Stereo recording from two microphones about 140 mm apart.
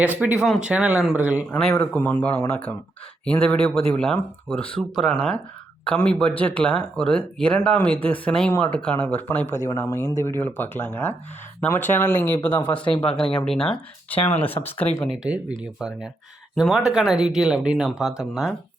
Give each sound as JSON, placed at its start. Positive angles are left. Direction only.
{"t": 0.2, "sound": "speech", "side_deg": -5}
{"t": 1.5, "sound": "speech", "side_deg": 5}
{"t": 15.0, "sound": "speech", "side_deg": -5}